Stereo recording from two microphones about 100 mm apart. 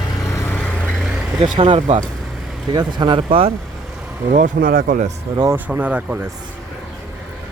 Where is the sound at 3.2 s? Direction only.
70° right (ahead or behind).